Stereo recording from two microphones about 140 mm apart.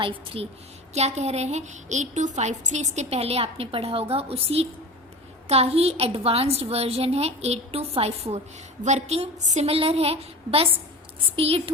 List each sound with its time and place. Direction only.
0.0 s a woman's voice: 40° right (ahead or behind)
0.9 s a woman's voice: 50° right (ahead or behind)